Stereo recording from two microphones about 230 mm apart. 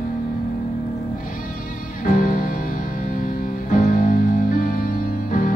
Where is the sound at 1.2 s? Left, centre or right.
Left.